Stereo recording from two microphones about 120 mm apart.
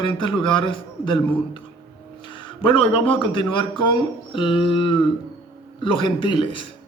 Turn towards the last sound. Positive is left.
turn(degrees=45)  # may be behind; listen again after turning